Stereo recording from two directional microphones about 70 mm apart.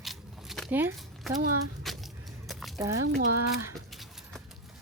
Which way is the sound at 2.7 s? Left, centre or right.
Right.